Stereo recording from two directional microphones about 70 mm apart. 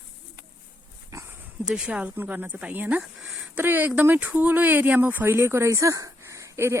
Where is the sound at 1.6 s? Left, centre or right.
Centre.